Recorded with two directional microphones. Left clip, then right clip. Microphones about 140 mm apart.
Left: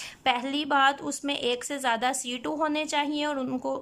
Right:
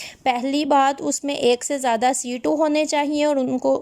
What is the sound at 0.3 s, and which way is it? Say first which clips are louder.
Speech: right 6 dB; 35° right (ahead or behind).